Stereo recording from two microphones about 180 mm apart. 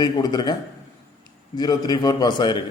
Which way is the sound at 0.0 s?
25° left (ahead or behind).